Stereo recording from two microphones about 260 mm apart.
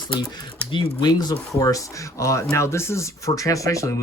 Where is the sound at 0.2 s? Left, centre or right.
Centre.